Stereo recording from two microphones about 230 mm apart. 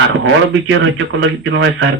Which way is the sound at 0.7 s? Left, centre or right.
Right.